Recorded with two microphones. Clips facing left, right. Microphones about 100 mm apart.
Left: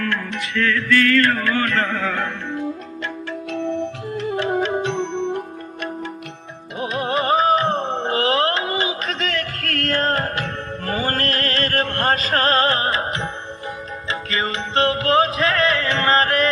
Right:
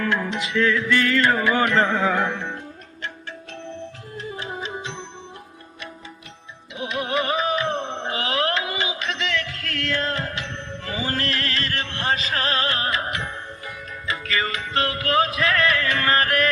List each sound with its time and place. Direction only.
0.0 s music: 15° right (ahead or behind)
3.0 s music: 90° left; by 5.4 s 65° left (ahead or behind)
6.7 s music: 40° left (ahead or behind)